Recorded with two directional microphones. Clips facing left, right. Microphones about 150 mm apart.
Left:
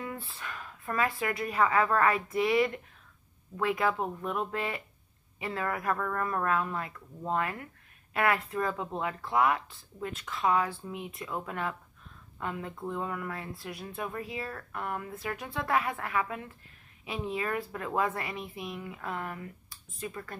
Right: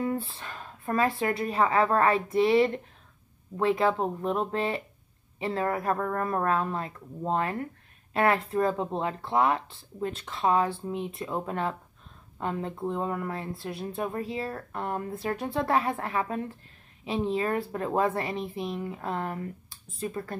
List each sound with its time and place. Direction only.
0.0 s speech: 30° right (ahead or behind)